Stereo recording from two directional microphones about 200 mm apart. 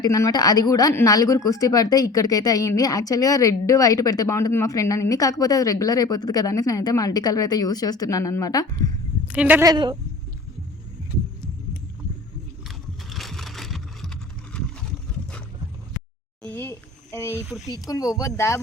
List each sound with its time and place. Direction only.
0.0 s a woman's voice: 15° left (ahead or behind)
9.2 s speech: 5° right (ahead or behind)
12.6 s vehicle: centre (ahead or behind)
16.4 s a woman's voice: 10° left (ahead or behind)